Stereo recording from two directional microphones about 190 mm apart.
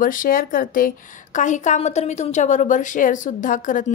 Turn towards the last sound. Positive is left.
turn(degrees=40)  # may be behind; listen again after turning